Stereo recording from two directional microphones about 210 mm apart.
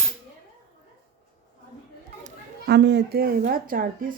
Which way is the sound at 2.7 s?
55° right (ahead or behind).